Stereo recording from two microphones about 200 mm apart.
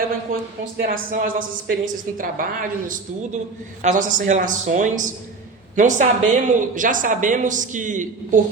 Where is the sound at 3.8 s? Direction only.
40° right (ahead or behind).